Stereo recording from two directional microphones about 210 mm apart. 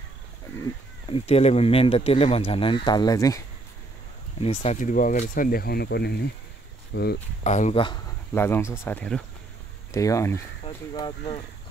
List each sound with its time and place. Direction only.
1.0 s speech: 25° left (ahead or behind)
4.4 s speech: 30° left (ahead or behind); by 7.2 s 50° left (ahead or behind)
7.4 s speech: 35° left (ahead or behind)
8.4 s speech: 10° left (ahead or behind)